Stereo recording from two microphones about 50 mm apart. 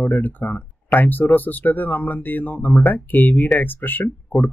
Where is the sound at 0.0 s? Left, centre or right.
Left.